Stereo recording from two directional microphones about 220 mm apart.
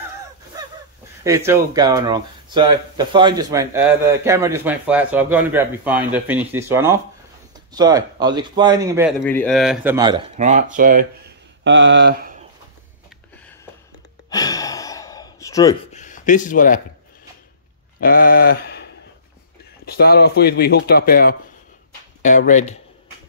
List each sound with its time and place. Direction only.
1.2 s speech: 15° right (ahead or behind)
9.2 s speech: 5° left (ahead or behind)
9.9 s speech: 20° right (ahead or behind)
10.3 s speech: 35° right (ahead or behind)
11.6 s speech: 55° right (ahead or behind)
14.3 s gasp: 15° left (ahead or behind)
15.9 s a sound: 35° left (ahead or behind)
18.0 s a sound: 40° left (ahead or behind)
19.8 s speech: 45° left (ahead or behind)
22.2 s a sound: 35° left (ahead or behind)